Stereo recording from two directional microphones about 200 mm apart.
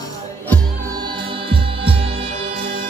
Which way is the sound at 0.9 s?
25° right (ahead or behind).